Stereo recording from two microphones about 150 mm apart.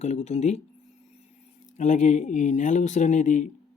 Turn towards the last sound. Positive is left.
turn(degrees=55)  # may be behind; listen again after turning